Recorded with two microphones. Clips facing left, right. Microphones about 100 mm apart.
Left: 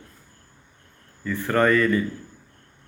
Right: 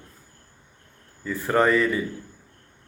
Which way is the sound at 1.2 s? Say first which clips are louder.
Even; 20° right (ahead or behind).